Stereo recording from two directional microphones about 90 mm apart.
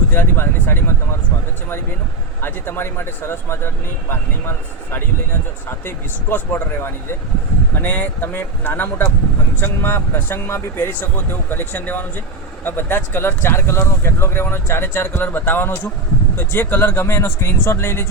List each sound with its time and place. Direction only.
0.1 s speech: 20° left (ahead or behind)
2.4 s speech: 25° left (ahead or behind)